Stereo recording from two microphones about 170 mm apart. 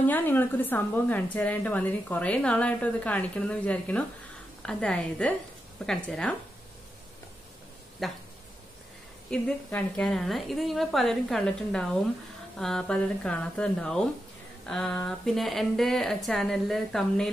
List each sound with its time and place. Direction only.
0.0 s a woman's voice: 10° left (ahead or behind)
8.0 s a woman's voice: centre (ahead or behind)
9.3 s a woman's voice: 5° left (ahead or behind)